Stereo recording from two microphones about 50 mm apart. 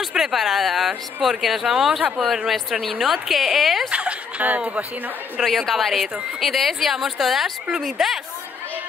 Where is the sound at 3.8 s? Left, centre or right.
Right.